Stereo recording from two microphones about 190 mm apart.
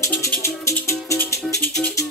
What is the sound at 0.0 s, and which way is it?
Music, 10° left (ahead or behind).